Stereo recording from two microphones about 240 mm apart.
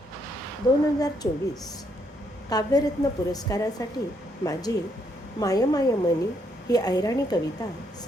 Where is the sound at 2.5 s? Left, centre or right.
Centre.